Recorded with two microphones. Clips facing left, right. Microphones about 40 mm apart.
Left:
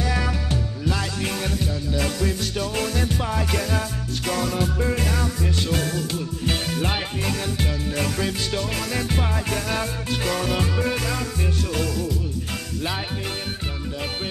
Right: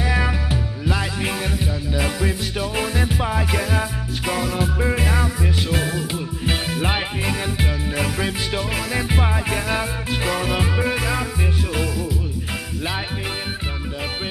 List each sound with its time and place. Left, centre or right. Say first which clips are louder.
0.0 s music: right 3 dB; centre